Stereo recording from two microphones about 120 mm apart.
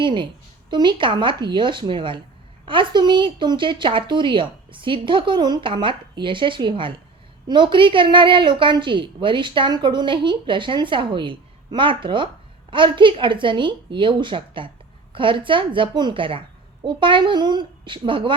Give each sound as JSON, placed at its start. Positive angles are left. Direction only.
{"t": 0.0, "sound": "a woman's voice", "side_deg": -40}